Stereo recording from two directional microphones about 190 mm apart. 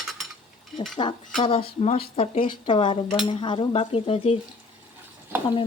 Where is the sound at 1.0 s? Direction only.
25° left (ahead or behind).